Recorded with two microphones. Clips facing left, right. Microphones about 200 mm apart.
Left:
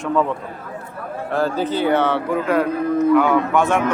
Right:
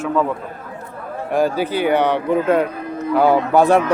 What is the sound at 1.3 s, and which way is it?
Speech, 15° right (ahead or behind).